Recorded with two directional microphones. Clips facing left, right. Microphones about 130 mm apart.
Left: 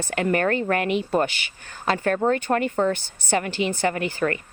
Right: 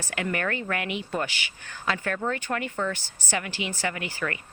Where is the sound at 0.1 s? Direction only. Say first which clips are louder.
Left 7 dB; 40° left (ahead or behind).